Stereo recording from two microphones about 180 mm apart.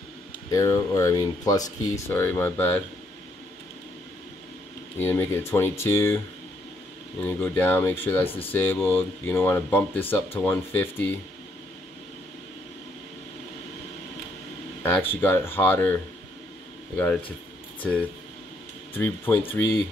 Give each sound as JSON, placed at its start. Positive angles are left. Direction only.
{"t": 0.5, "sound": "speech", "side_deg": 20}
{"t": 4.9, "sound": "speech", "side_deg": 10}
{"t": 7.2, "sound": "speech", "side_deg": 10}
{"t": 14.8, "sound": "speech", "side_deg": 10}
{"t": 18.9, "sound": "speech", "side_deg": 10}